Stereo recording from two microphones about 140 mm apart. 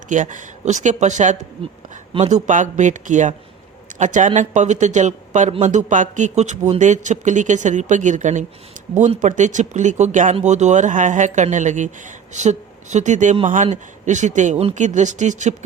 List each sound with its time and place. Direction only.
0.1 s speech: 65° right (ahead or behind)